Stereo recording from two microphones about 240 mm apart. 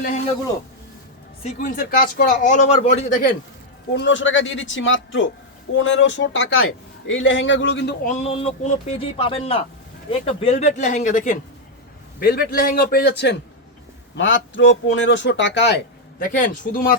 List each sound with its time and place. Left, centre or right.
1.5 s speech: left
3.9 s speech: left
8.0 s speech: left